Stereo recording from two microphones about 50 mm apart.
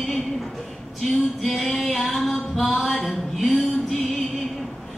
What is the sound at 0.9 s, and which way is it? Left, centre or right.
Female singing, centre.